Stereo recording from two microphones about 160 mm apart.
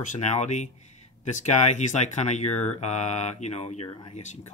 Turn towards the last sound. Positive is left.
turn(degrees=45)  # may be behind; listen again after turning